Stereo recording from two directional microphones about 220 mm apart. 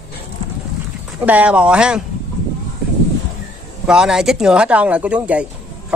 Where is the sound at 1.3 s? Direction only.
5° right (ahead or behind).